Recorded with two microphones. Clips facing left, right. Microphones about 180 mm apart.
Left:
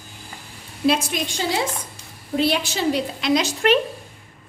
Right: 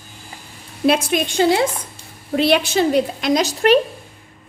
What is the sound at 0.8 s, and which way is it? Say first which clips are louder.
A woman's voice: right 4 dB; 60° right (ahead or behind).